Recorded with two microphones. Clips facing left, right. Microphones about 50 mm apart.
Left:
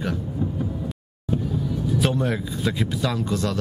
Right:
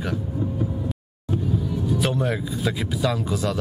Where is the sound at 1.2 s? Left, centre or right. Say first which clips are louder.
Even; centre.